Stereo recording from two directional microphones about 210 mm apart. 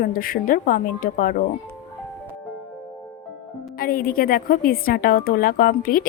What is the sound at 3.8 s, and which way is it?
A woman's voice, 45° left (ahead or behind).